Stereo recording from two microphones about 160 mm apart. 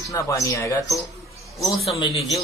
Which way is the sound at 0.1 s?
20° left (ahead or behind).